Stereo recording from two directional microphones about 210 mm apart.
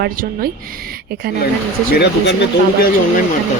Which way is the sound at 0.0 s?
45° right (ahead or behind).